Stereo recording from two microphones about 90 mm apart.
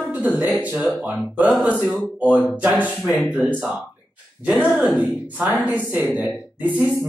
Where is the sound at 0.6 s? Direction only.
15° right (ahead or behind).